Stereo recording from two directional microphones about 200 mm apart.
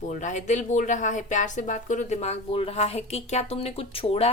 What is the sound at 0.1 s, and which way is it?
Speech, 40° left (ahead or behind).